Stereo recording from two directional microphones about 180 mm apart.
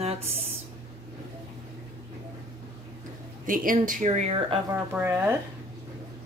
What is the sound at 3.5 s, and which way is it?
Speech, 50° right (ahead or behind).